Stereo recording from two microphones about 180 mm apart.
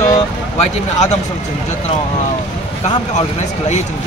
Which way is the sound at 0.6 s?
40° left (ahead or behind).